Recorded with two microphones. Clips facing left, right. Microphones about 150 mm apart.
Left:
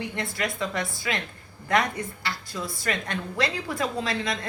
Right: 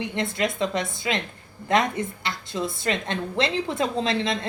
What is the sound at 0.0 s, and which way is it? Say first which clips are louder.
A woman's voice: right 4 dB; 20° right (ahead or behind).